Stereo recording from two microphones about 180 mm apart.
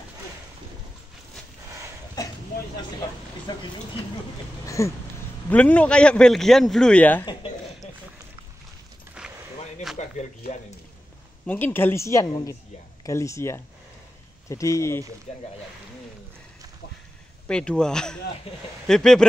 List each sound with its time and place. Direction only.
3.5 s speech: 25° left (ahead or behind)
4.6 s a woman's voice: 15° left (ahead or behind)
9.2 s a sound: 5° right (ahead or behind)
11.4 s a woman's voice: 10° left (ahead or behind)
17.5 s a man's voice: 5° left (ahead or behind)